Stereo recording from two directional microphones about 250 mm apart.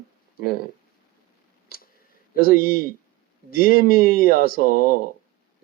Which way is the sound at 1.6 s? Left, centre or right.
Left.